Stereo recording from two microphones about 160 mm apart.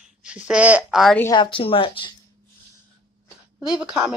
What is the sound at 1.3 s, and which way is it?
Speech, 30° left (ahead or behind).